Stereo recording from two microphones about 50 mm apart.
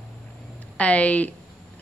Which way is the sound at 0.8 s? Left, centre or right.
Left.